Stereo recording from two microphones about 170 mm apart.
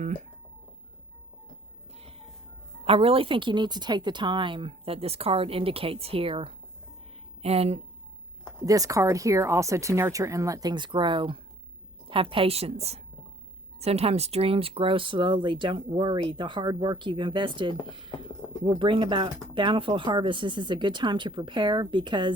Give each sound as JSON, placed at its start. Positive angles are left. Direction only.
{"t": 0.0, "sound": "speech", "side_deg": -45}
{"t": 1.9, "sound": "music", "side_deg": -35}
{"t": 2.8, "sound": "speech", "side_deg": -35}
{"t": 8.6, "sound": "speech", "side_deg": -20}